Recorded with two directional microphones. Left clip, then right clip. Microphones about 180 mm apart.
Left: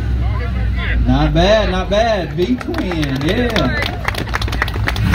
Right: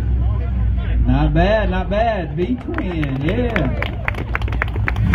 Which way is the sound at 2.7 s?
40° left (ahead or behind).